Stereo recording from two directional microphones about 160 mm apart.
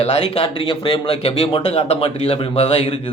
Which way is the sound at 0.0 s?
40° left (ahead or behind).